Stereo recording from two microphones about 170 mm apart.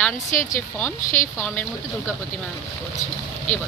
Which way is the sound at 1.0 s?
50° left (ahead or behind).